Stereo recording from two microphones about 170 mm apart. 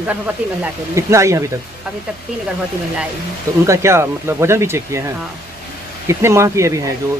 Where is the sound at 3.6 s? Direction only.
15° right (ahead or behind).